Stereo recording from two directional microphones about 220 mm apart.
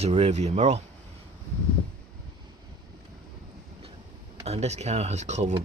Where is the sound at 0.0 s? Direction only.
30° right (ahead or behind).